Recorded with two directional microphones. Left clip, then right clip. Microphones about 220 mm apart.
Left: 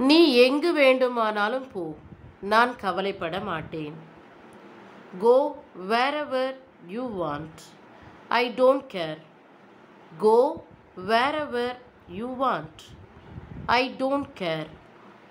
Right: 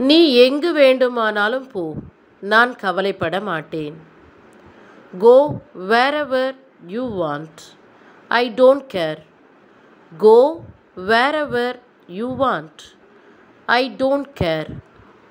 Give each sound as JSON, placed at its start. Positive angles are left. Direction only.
{"t": 0.0, "sound": "a woman's voice", "side_deg": -15}
{"t": 5.2, "sound": "a woman's voice", "side_deg": -20}